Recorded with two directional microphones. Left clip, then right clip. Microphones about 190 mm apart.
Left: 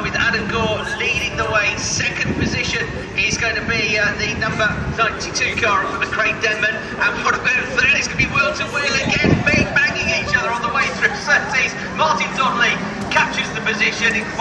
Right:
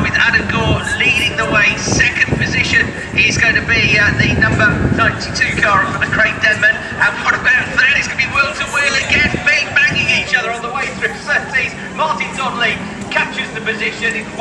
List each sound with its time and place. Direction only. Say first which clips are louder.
0.0 s vehicle: right 6 dB; 50° left (ahead or behind)